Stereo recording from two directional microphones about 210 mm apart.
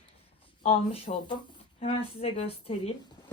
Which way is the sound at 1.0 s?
20° left (ahead or behind).